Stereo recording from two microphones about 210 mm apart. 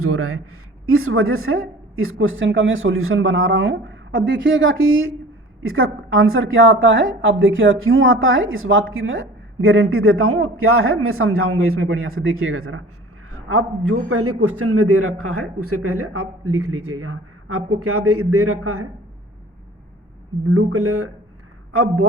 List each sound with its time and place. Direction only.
0.0 s a man's voice: 90° right
13.3 s a man's voice: 90° right
20.5 s a man's voice: 90° right